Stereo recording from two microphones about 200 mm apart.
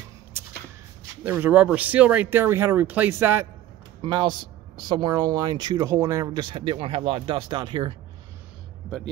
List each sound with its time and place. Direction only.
0.3 s a sound: 10° right (ahead or behind)
1.2 s speech: 10° right (ahead or behind)
4.0 s speech: 20° right (ahead or behind)